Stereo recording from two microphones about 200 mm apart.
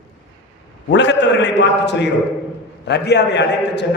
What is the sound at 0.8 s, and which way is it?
A man's voice, 65° left (ahead or behind).